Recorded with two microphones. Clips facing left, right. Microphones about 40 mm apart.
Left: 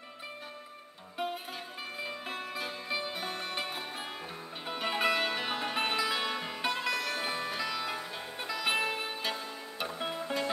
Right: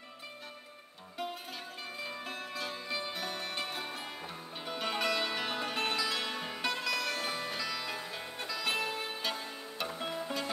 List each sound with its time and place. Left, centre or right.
1.1 s music: centre
6.6 s music: left
9.2 s music: centre